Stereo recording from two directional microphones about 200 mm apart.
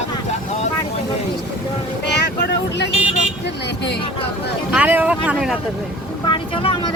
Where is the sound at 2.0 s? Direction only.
55° left (ahead or behind).